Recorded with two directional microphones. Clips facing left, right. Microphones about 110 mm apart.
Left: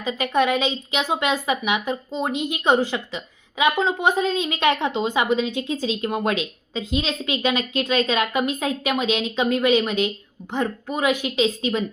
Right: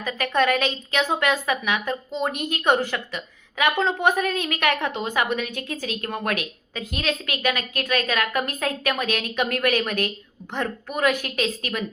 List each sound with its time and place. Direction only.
0.0 s a woman's voice: 20° left (ahead or behind)